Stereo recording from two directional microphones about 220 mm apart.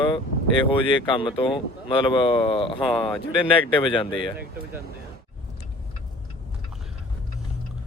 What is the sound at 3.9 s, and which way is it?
Speech, 20° left (ahead or behind).